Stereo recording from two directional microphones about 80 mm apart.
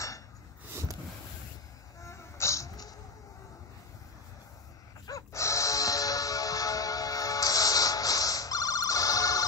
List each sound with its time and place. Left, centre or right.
2.0 s music: left
5.0 s music: left